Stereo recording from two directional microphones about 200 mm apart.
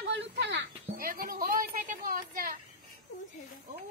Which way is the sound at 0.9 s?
45° right (ahead or behind).